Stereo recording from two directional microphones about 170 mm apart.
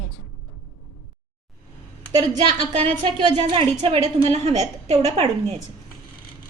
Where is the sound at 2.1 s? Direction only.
20° right (ahead or behind).